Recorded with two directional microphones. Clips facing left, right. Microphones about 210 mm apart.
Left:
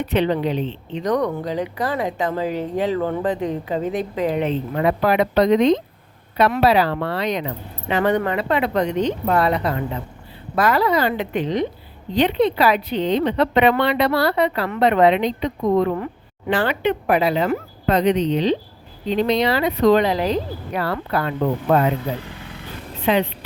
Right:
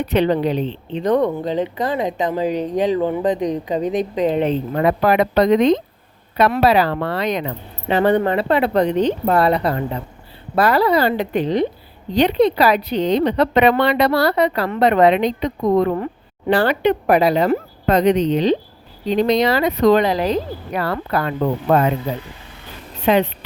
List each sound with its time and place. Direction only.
0.0 s speech: 40° right (ahead or behind); by 4.4 s 20° right (ahead or behind)
4.4 s speech: 40° right (ahead or behind)
7.9 s speech: 30° right (ahead or behind); by 21.3 s 45° right (ahead or behind)
23.1 s speech: 45° right (ahead or behind)